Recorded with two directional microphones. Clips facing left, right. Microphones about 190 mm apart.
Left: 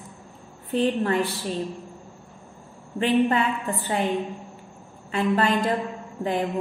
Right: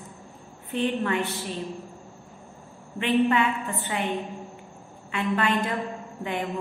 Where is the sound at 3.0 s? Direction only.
35° left (ahead or behind).